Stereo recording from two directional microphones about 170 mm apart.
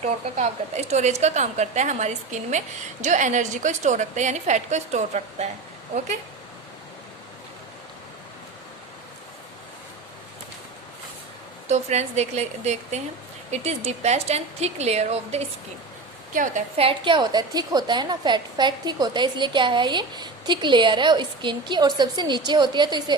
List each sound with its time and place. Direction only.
0.0 s a woman's voice: 40° right (ahead or behind)
11.7 s a woman's voice: 40° right (ahead or behind)
16.3 s a woman's voice: 50° right (ahead or behind)
16.7 s a woman's voice: 30° right (ahead or behind)